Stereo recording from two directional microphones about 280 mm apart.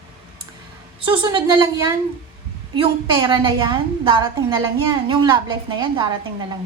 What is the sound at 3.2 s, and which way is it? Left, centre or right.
A woman's voice, centre.